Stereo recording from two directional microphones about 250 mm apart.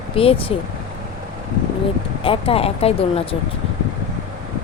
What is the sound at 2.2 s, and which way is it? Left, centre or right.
Speech, left.